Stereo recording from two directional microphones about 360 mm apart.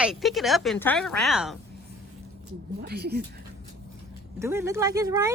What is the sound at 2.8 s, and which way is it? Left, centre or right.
Speech, right.